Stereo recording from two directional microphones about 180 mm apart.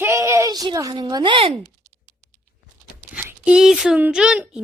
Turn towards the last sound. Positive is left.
turn(degrees=-5)  # may be behind; listen again after turning